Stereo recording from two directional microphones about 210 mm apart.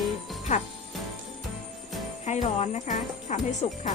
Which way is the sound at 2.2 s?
30° left (ahead or behind).